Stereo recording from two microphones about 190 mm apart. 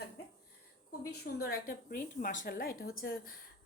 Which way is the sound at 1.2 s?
50° left (ahead or behind).